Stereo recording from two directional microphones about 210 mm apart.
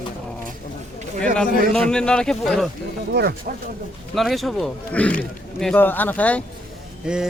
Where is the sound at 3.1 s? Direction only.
50° right (ahead or behind).